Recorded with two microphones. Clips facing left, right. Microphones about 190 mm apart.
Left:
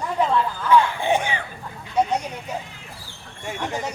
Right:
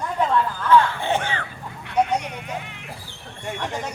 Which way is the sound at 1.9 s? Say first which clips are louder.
Even; 70° right (ahead or behind).